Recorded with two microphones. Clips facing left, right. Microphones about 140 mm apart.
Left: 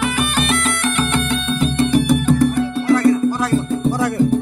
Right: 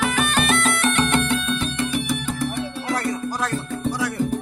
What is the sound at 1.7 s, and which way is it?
Music, 45° left (ahead or behind).